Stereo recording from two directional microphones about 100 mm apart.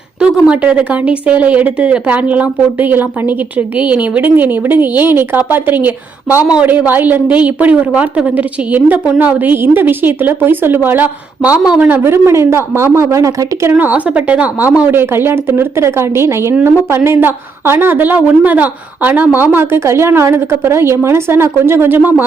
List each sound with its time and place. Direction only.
0.2 s a woman's voice: 10° right (ahead or behind)
11.6 s a woman's voice: 10° right (ahead or behind)
11.9 s a woman's voice: 25° right (ahead or behind)
13.7 s a woman's voice: 15° right (ahead or behind)